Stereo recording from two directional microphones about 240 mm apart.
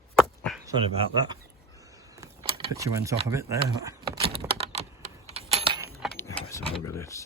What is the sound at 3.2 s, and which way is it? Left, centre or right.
Speech, centre.